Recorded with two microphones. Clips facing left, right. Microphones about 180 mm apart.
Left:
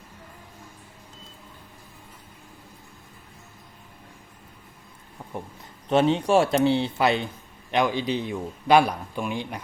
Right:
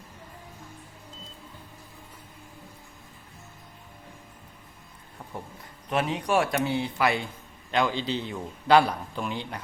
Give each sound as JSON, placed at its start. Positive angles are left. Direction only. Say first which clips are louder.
{"t": 5.9, "sound": "a man's voice", "louder": "left 6 dB", "side_deg": 25}